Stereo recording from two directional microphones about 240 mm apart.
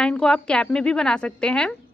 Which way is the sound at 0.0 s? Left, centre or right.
Centre.